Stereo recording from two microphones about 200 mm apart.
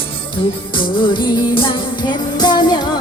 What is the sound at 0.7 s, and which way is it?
Music, 25° left (ahead or behind).